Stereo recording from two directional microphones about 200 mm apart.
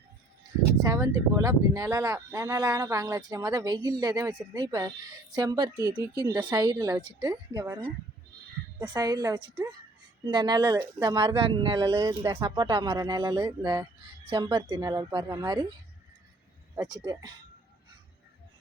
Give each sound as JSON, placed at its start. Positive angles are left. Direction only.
{"t": 0.8, "sound": "speech", "side_deg": -15}
{"t": 8.8, "sound": "speech", "side_deg": -20}
{"t": 16.7, "sound": "speech", "side_deg": -20}